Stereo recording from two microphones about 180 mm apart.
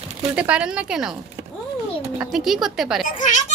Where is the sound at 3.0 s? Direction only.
45° left (ahead or behind).